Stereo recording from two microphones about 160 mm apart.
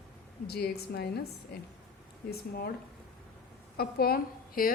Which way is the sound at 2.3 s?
75° left (ahead or behind).